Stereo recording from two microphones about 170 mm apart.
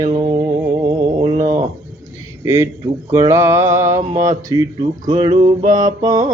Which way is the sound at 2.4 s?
20° right (ahead or behind).